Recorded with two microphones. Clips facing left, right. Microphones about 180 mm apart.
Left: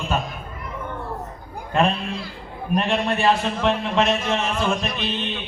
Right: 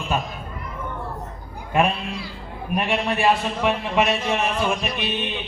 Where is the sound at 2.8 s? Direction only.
10° right (ahead or behind).